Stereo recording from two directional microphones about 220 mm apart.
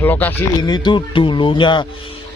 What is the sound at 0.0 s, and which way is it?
Speech, 10° left (ahead or behind).